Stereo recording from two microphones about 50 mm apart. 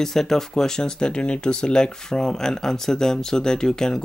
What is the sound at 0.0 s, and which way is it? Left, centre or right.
Speech, centre.